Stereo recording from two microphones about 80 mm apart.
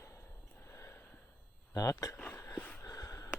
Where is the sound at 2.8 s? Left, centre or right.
Left.